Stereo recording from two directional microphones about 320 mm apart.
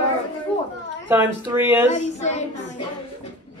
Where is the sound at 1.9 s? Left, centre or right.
Left.